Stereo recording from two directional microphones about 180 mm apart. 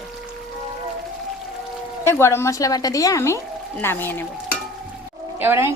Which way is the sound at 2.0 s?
15° left (ahead or behind).